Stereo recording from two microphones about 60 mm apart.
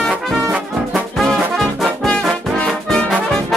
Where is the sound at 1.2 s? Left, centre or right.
Centre.